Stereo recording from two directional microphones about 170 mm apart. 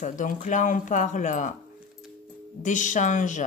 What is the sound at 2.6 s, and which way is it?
Speech, 45° left (ahead or behind).